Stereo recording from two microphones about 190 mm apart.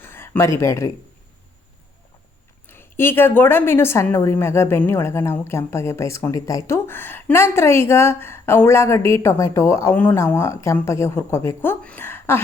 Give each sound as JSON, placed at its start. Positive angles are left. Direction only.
{"t": 0.0, "sound": "a sound", "side_deg": 10}
{"t": 0.6, "sound": "a woman's voice", "side_deg": 15}
{"t": 2.6, "sound": "a woman's voice", "side_deg": 10}